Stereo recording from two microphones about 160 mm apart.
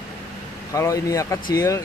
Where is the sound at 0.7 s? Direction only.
20° left (ahead or behind).